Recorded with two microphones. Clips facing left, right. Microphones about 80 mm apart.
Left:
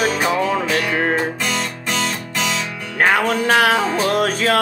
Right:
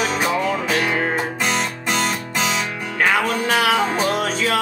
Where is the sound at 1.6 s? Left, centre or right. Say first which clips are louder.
Right 1 dB; centre.